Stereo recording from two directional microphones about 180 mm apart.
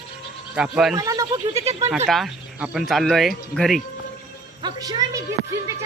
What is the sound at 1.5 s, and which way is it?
Speech, 35° right (ahead or behind).